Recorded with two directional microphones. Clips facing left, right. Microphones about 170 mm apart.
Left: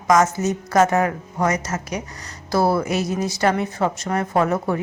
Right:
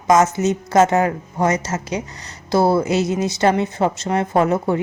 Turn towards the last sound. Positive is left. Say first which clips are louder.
# right 3 dB
turn(degrees=-25)  # may be behind; listen again after turning